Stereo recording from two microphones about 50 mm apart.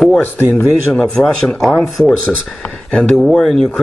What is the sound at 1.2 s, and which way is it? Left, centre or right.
Speech, left.